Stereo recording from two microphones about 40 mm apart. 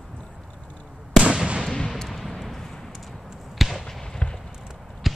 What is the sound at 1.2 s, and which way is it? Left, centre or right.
Fireworks, right.